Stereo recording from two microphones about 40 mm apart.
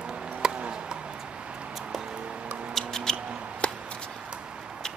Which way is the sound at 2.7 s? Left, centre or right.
Centre.